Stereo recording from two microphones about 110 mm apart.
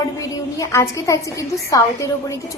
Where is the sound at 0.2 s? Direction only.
30° left (ahead or behind).